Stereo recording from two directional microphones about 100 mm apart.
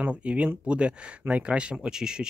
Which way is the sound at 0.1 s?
15° right (ahead or behind).